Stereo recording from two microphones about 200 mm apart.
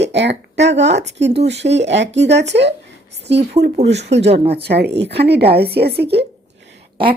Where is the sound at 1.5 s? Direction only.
60° right (ahead or behind).